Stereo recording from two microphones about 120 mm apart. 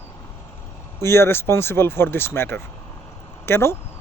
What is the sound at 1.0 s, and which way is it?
Speech, 20° left (ahead or behind).